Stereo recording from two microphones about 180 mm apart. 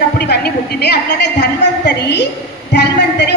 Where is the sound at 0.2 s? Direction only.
65° left (ahead or behind).